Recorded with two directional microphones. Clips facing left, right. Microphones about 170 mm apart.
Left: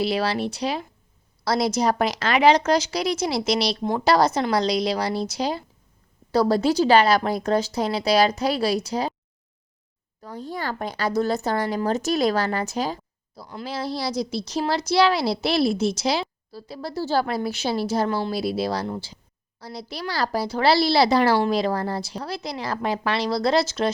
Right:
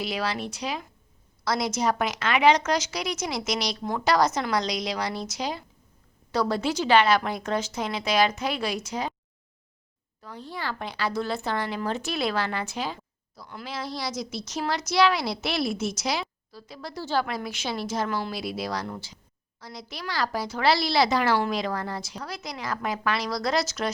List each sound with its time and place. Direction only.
0.0 s speech: 30° left (ahead or behind)
10.2 s speech: 45° left (ahead or behind)